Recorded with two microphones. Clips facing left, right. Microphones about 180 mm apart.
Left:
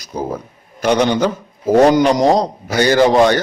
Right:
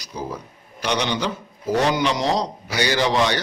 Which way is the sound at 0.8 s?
50° left (ahead or behind).